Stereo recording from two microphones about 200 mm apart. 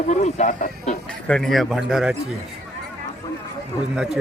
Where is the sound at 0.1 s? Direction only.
35° left (ahead or behind).